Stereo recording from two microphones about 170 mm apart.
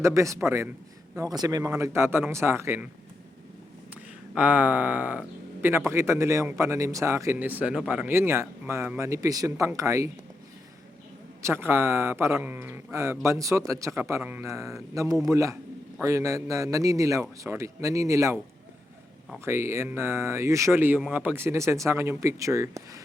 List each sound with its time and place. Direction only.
0.0 s a man's voice: 15° right (ahead or behind)
4.4 s a man's voice: 10° right (ahead or behind)
11.4 s a man's voice: 15° right (ahead or behind)
19.5 s a man's voice: 15° right (ahead or behind)